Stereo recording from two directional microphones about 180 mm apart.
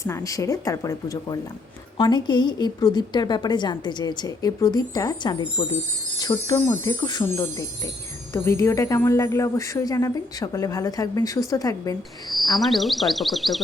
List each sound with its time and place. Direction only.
0.0 s a woman's voice: 20° left (ahead or behind)
12.5 s speech: centre (ahead or behind)